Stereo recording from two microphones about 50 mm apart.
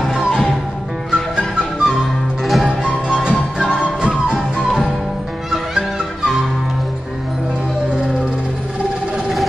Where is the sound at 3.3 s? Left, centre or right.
Centre.